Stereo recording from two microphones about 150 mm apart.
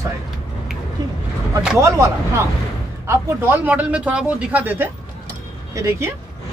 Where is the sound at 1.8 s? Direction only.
20° right (ahead or behind).